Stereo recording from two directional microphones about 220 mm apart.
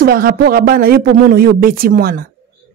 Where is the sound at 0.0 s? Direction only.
45° right (ahead or behind).